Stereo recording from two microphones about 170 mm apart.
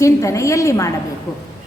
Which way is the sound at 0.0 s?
20° left (ahead or behind).